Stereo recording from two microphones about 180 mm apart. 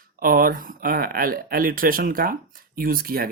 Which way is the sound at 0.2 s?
50° right (ahead or behind).